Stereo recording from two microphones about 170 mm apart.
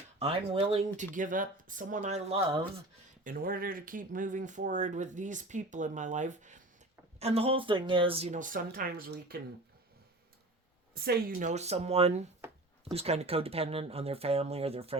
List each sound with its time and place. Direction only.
0.2 s speech: 35° right (ahead or behind)
3.2 s speech: 55° right (ahead or behind)
10.9 s speech: 60° right (ahead or behind); by 14.9 s 35° right (ahead or behind)